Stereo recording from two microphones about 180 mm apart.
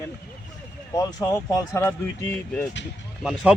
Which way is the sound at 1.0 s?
20° left (ahead or behind).